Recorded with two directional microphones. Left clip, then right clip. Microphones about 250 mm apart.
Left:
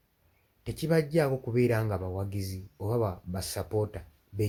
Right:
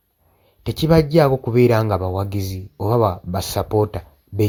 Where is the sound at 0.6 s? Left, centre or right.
Right.